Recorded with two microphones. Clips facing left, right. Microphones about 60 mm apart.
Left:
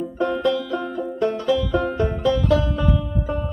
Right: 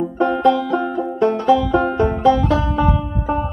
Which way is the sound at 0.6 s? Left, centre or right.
Right.